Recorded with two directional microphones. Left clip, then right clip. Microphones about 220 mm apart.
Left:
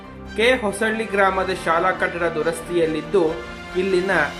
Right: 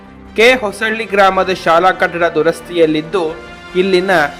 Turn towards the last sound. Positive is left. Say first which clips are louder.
# right 7 dB
turn(degrees=-40)  # may be behind; listen again after turning